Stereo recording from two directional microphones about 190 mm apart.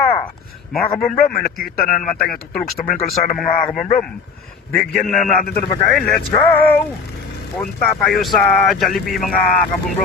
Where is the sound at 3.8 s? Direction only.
35° left (ahead or behind).